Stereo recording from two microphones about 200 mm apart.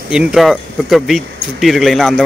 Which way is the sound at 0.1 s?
5° right (ahead or behind).